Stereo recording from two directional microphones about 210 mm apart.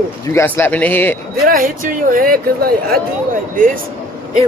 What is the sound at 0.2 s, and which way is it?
A man's voice, 15° left (ahead or behind).